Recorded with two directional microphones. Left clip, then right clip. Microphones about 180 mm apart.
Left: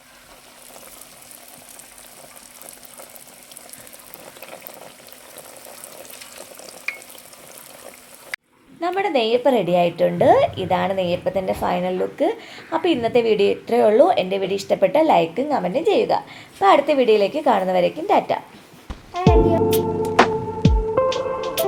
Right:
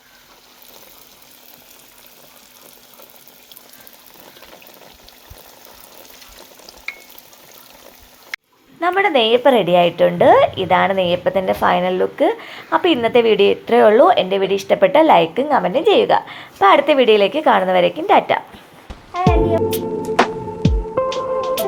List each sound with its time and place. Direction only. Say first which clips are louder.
8.8 s a woman's voice: right 5 dB; 5° right (ahead or behind)
18.9 s music: right 1 dB; centre (ahead or behind)